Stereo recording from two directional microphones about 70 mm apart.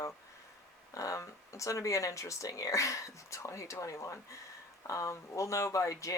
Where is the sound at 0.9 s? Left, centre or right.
Left.